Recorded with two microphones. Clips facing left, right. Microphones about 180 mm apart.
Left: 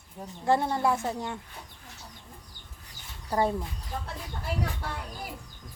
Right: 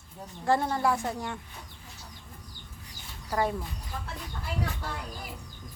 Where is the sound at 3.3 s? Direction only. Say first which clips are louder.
Left 2 dB; 25° left (ahead or behind).